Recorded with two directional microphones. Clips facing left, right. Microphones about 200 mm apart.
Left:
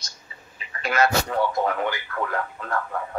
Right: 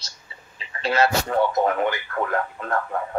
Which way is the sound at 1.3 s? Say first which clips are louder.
Right 3 dB; 45° right (ahead or behind).